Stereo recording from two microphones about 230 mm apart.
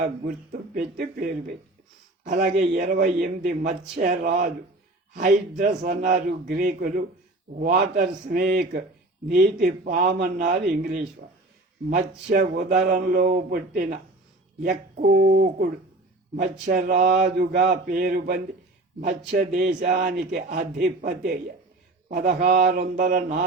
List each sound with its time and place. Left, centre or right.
0.3 s a man's voice: right